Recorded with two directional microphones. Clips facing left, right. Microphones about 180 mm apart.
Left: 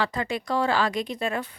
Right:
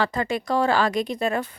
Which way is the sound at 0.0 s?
45° right (ahead or behind).